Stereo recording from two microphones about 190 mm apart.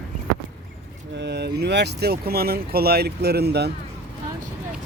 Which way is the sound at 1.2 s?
60° right (ahead or behind).